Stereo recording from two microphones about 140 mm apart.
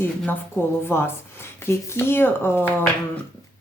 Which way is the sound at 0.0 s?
15° left (ahead or behind).